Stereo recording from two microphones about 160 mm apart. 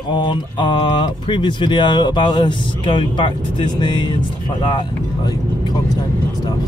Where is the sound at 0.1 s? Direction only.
30° left (ahead or behind).